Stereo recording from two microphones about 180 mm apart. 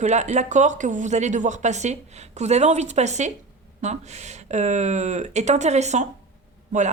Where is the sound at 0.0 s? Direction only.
40° right (ahead or behind).